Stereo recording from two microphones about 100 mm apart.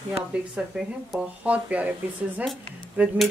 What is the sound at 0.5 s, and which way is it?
A woman's voice, 5° right (ahead or behind).